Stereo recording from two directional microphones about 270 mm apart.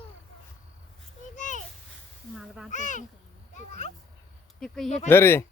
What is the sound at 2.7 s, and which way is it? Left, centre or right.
Speech, left.